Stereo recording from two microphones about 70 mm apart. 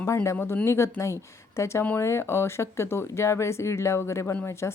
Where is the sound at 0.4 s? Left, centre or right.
Left.